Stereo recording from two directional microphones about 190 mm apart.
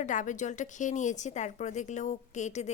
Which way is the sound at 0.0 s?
40° left (ahead or behind).